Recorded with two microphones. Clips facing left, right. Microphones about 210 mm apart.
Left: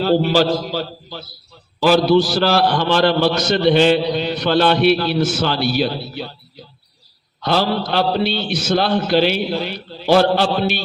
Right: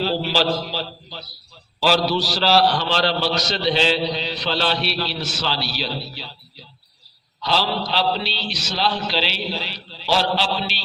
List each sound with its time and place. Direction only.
0.0 s a man's voice: 50° left (ahead or behind)